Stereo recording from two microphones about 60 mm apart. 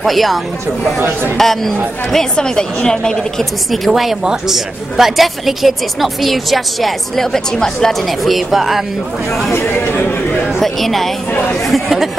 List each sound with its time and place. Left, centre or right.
0.0 s speech: centre
1.4 s a woman's voice: centre
3.7 s speech: centre
9.5 s speech: left
10.4 s a woman's voice: centre